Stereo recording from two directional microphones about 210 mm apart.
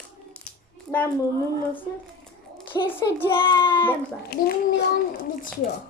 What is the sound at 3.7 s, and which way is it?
Speech, 10° left (ahead or behind).